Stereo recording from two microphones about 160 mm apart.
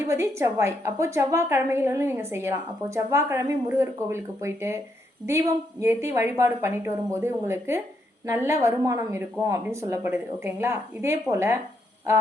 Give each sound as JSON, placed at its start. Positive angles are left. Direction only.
{"t": 0.0, "sound": "a woman's voice", "side_deg": -15}
{"t": 5.8, "sound": "a woman's voice", "side_deg": -15}